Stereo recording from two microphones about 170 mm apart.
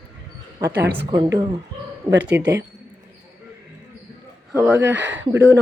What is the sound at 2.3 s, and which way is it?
Speech, 15° right (ahead or behind).